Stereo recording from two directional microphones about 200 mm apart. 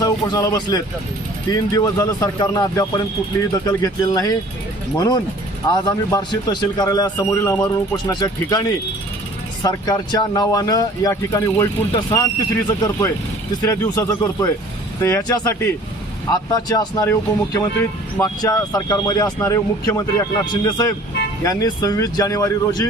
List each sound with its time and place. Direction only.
0.0 s speech: 20° left (ahead or behind)
9.6 s speech: 20° left (ahead or behind)